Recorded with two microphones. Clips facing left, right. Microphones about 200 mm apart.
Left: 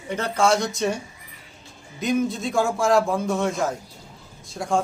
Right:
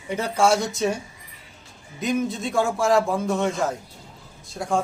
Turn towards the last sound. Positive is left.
turn(degrees=0)  # may be behind; listen again after turning